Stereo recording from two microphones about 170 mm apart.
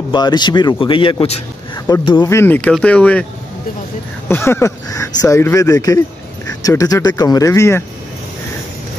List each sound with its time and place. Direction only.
0.1 s speech: 25° left (ahead or behind)
1.9 s speech: 25° left (ahead or behind); by 3.3 s 5° left (ahead or behind)
4.3 s speech: 15° left (ahead or behind)